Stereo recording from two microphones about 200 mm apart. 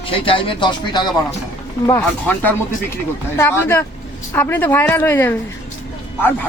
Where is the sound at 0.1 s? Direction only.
25° left (ahead or behind).